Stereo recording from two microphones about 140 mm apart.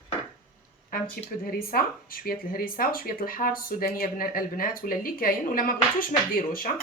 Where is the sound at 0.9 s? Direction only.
90° left.